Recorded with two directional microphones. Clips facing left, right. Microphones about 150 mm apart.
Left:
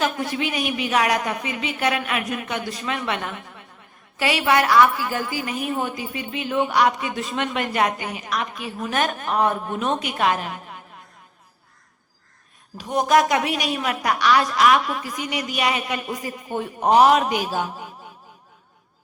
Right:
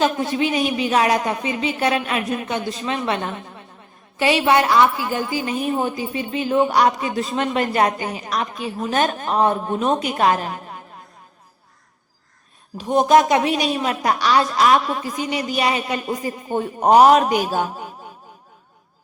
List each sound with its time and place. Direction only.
0.0 s a woman's voice: 25° right (ahead or behind)
12.7 s a woman's voice: 25° right (ahead or behind); by 17.8 s 45° right (ahead or behind)